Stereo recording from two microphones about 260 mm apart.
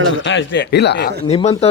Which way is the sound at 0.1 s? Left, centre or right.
Left.